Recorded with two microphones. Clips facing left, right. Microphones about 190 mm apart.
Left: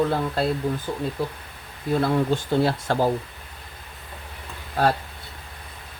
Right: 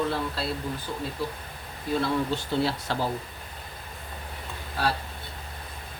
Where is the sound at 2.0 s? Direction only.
50° left (ahead or behind).